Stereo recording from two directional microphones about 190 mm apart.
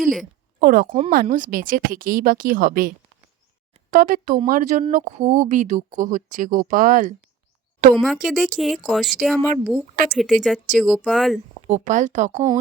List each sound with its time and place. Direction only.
0.0 s a woman's voice: centre (ahead or behind)
0.6 s speech: 45° right (ahead or behind)
3.9 s speech: 45° right (ahead or behind)
8.0 s speech: centre (ahead or behind)
11.7 s speech: 40° right (ahead or behind)